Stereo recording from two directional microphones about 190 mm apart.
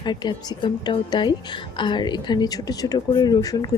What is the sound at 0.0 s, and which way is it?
A woman's voice, 25° left (ahead or behind).